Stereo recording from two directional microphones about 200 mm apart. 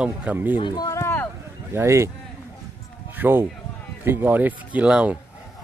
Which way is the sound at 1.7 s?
15° right (ahead or behind).